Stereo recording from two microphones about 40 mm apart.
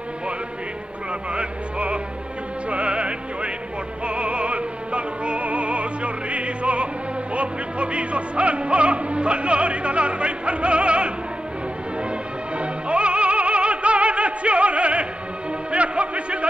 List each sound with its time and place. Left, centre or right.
1.3 s music: right
12.5 s music: right
15.7 s speech: right